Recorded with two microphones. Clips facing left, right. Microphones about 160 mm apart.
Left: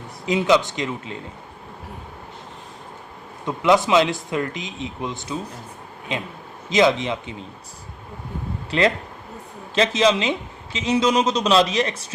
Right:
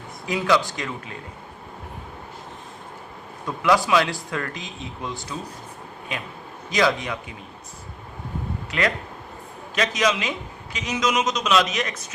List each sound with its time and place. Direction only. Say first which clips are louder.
0.3 s a man's voice: left 3 dB; 20° left (ahead or behind)
3.4 s a man's voice: left 3 dB; 20° left (ahead or behind)
8.7 s a man's voice: left 5 dB; 30° left (ahead or behind)